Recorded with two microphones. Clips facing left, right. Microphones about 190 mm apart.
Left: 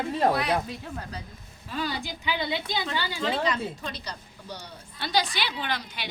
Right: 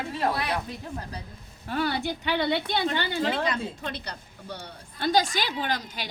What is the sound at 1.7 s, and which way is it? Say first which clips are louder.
Speech: right 4 dB; 65° right (ahead or behind).